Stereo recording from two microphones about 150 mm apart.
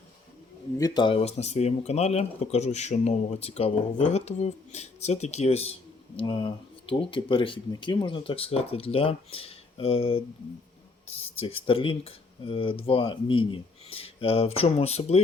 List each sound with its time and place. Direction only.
0.8 s speech: 25° left (ahead or behind); by 5.7 s 45° left (ahead or behind)
6.1 s speech: 30° left (ahead or behind)